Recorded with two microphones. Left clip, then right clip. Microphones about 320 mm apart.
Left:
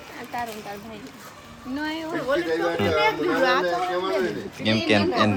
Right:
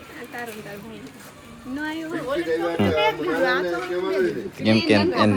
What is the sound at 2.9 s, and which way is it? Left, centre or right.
Speech, left.